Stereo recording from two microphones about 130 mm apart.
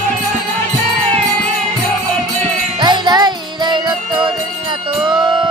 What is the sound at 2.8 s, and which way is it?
Music, 35° right (ahead or behind).